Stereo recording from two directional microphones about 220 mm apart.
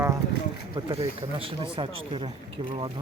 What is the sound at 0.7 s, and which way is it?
Speech, 25° right (ahead or behind).